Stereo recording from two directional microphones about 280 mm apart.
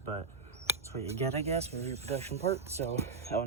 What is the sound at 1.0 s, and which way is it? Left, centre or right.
Speech, right.